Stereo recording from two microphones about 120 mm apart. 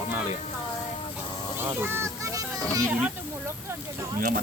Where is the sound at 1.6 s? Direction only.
20° right (ahead or behind).